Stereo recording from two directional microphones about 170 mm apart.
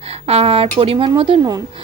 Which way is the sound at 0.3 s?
35° right (ahead or behind).